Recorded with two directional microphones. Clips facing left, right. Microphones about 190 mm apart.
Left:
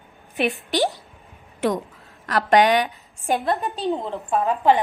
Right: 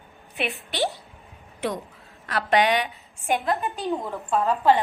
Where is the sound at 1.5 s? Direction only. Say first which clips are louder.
Left 6 dB; 45° left (ahead or behind).